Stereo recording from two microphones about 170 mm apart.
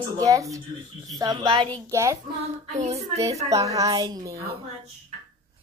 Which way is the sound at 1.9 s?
15° right (ahead or behind).